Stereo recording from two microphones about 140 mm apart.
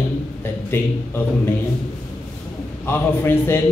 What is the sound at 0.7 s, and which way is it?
Speech, 15° left (ahead or behind).